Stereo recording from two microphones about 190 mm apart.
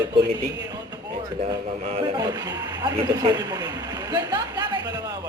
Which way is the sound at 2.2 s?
20° right (ahead or behind).